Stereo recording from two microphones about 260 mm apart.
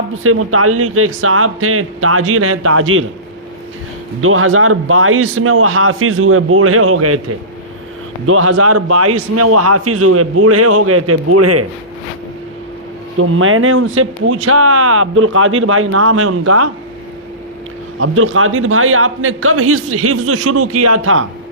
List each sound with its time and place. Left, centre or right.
0.2 s a man's voice: right
4.2 s a man's voice: right
8.3 s a man's voice: right
13.1 s speech: right
18.0 s a man's voice: right